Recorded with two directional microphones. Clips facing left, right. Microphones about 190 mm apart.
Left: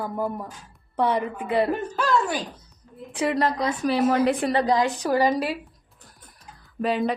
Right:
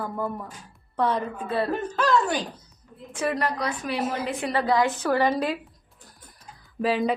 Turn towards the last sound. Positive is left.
turn(degrees=0)  # may be behind; listen again after turning